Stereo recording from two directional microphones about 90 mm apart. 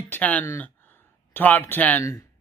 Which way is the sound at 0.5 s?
20° left (ahead or behind).